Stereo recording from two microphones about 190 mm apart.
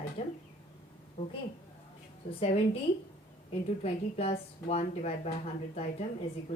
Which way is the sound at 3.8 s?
35° left (ahead or behind).